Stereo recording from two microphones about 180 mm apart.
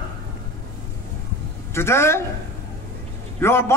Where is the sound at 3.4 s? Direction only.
15° left (ahead or behind).